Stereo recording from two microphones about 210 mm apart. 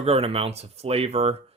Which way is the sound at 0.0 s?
30° right (ahead or behind).